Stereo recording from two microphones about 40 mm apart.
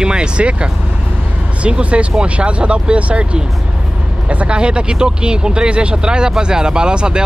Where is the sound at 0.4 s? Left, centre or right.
Right.